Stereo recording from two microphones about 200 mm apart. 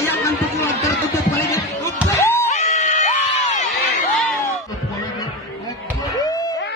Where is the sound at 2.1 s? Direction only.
10° left (ahead or behind).